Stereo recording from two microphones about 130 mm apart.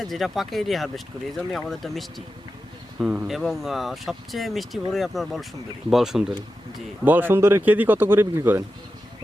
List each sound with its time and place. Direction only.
0.0 s speech: centre (ahead or behind)
7.0 s speech: 15° right (ahead or behind)